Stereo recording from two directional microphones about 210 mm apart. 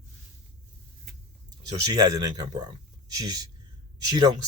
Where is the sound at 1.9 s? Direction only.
15° right (ahead or behind).